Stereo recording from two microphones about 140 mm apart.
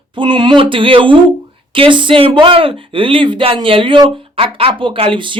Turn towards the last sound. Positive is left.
turn(degrees=-35)  # may be behind; listen again after turning